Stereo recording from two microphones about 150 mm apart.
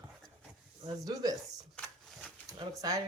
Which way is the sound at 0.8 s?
25° right (ahead or behind).